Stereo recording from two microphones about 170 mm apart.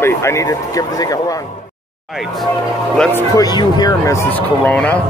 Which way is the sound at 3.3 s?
20° left (ahead or behind).